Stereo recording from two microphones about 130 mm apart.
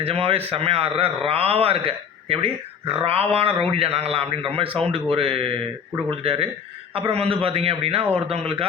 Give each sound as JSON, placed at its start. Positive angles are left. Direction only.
{"t": 0.0, "sound": "speech", "side_deg": -45}